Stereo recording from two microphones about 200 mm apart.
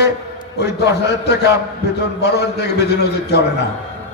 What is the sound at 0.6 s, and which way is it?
A man's voice, 55° left (ahead or behind).